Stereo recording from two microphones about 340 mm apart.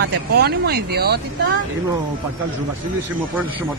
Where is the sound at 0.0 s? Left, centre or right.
Right.